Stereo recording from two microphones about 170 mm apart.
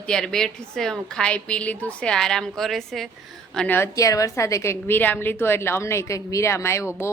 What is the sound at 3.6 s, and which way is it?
A woman's voice, 10° left (ahead or behind).